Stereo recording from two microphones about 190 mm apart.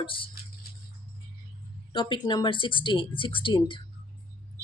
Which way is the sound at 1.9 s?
25° left (ahead or behind).